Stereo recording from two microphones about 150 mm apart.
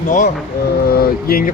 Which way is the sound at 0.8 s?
90° left.